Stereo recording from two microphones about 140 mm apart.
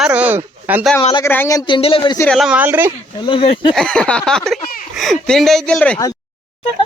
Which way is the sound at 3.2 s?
40° left (ahead or behind).